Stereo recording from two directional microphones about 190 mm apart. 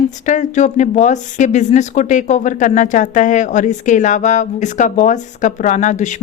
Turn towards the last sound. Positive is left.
turn(degrees=40)  # may be behind; listen again after turning